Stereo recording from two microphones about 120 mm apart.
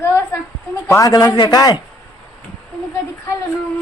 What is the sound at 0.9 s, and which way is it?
Speech, 30° left (ahead or behind).